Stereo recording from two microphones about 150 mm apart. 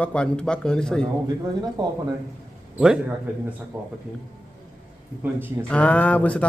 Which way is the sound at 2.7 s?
5° right (ahead or behind).